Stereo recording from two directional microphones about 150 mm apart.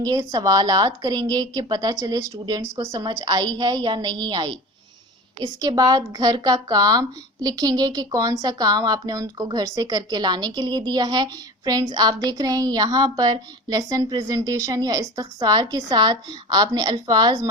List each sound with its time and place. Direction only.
0.0 s speech: 25° right (ahead or behind)